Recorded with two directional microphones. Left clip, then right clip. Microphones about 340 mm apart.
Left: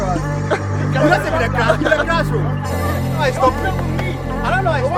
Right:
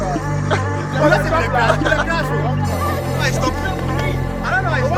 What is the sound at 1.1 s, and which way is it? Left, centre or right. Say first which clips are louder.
Speech: right 1 dB; centre.